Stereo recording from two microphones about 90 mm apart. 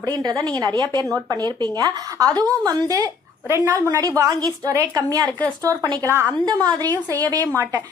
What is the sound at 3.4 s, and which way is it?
A woman's voice, 30° right (ahead or behind).